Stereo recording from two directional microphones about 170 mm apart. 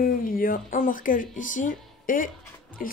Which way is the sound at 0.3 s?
55° left (ahead or behind).